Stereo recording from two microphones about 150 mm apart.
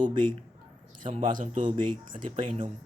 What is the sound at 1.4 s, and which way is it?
Speech, 60° right (ahead or behind).